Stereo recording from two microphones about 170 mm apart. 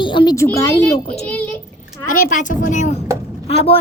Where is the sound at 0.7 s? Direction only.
5° left (ahead or behind).